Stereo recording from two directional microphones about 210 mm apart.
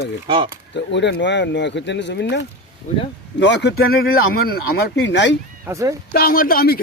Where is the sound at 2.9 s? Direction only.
35° left (ahead or behind).